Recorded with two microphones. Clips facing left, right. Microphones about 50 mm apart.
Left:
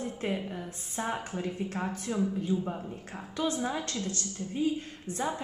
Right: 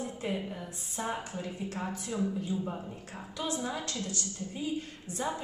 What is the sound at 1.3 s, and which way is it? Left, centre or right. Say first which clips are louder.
Speech: left 4 dB; left.